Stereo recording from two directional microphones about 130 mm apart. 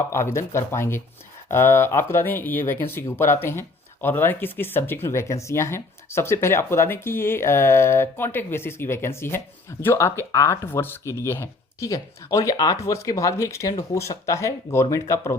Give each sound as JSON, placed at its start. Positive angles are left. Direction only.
{"t": 0.1, "sound": "speech", "side_deg": 20}